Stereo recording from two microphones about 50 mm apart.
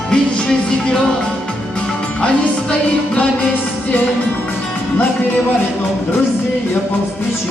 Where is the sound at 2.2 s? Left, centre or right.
Left.